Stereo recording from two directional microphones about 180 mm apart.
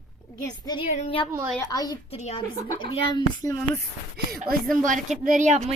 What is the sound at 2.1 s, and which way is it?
Speech, 35° left (ahead or behind).